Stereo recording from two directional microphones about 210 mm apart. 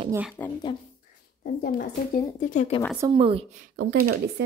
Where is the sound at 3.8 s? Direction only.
90° right.